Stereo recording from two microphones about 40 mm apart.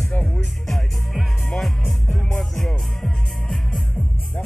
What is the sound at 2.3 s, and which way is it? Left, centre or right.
Music, centre.